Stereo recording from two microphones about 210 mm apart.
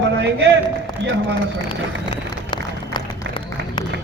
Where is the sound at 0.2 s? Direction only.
60° right (ahead or behind).